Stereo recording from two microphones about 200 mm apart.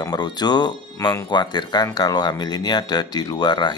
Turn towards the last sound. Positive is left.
turn(degrees=20)  # may be behind; listen again after turning